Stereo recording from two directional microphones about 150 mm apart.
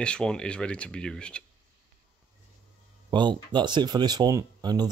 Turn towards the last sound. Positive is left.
turn(degrees=-25)  # may be behind; listen again after turning